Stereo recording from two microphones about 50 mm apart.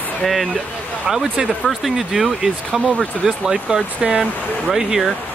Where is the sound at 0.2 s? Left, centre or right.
Centre.